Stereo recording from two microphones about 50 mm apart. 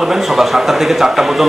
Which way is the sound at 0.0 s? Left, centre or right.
Centre.